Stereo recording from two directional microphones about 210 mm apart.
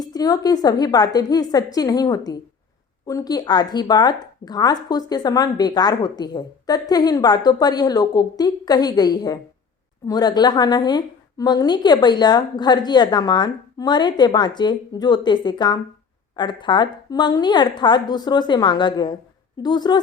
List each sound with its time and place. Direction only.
0.0 s a woman's voice: 20° left (ahead or behind)